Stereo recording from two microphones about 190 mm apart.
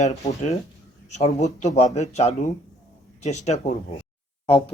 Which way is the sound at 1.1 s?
35° left (ahead or behind).